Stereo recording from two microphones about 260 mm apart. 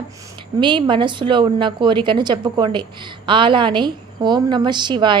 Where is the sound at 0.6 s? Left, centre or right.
Centre.